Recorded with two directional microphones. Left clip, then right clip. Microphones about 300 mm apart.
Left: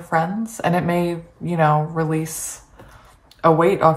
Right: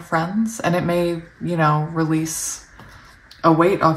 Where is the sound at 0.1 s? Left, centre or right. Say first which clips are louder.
Left 1 dB; centre.